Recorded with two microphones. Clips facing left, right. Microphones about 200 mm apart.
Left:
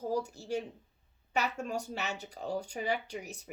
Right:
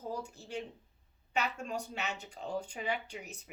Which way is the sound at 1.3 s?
40° left (ahead or behind).